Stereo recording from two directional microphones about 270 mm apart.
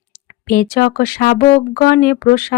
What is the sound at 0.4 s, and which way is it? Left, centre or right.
Speech, left.